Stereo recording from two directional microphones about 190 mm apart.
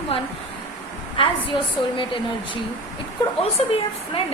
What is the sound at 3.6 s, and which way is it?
Speech, 30° left (ahead or behind).